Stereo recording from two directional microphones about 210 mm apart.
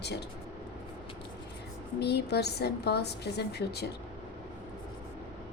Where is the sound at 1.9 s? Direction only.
50° left (ahead or behind).